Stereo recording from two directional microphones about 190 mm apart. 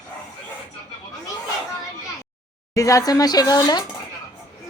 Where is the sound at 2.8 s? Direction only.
15° left (ahead or behind).